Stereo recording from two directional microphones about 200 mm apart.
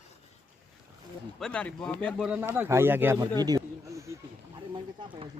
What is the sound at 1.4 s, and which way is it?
Speech, 5° left (ahead or behind).